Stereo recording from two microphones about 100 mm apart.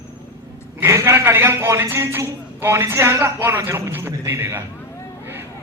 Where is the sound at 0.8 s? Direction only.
30° right (ahead or behind).